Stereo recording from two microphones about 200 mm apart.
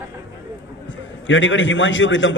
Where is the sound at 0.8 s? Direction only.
70° left (ahead or behind).